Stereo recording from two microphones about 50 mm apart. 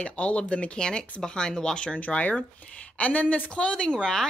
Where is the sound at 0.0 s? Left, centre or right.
Left.